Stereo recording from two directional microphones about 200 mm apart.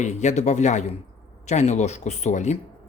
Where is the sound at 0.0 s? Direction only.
35° left (ahead or behind).